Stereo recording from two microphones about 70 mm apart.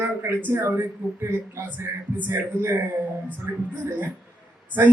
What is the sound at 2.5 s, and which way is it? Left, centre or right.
Speech, right.